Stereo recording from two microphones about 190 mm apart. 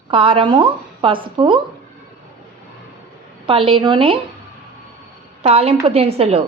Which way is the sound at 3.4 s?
25° right (ahead or behind).